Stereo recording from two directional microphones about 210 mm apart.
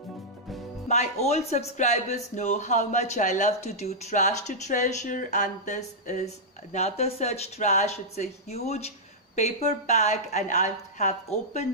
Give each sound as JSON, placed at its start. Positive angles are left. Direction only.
{"t": 0.8, "sound": "speech", "side_deg": 30}